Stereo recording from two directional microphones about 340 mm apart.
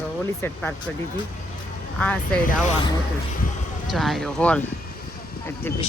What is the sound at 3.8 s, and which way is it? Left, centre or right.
Speech, centre.